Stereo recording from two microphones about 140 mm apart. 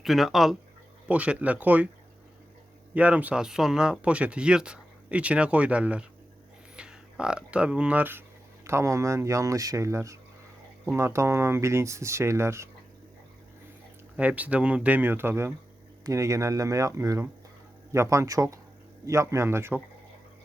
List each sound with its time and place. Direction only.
0.0 s speech: centre (ahead or behind)
2.9 s speech: 10° right (ahead or behind)
14.2 s speech: 10° right (ahead or behind)